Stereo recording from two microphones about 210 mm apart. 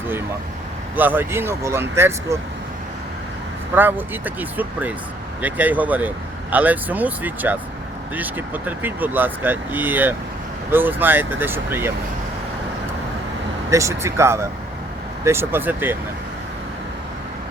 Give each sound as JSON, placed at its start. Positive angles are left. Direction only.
{"t": 0.9, "sound": "speech", "side_deg": -10}
{"t": 3.8, "sound": "speech", "side_deg": -10}
{"t": 13.7, "sound": "speech", "side_deg": -15}